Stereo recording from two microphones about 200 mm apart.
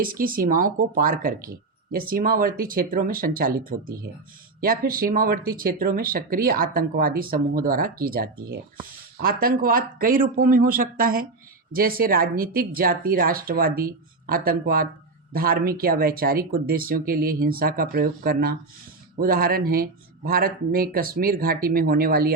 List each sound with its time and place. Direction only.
0.0 s speech: 45° right (ahead or behind)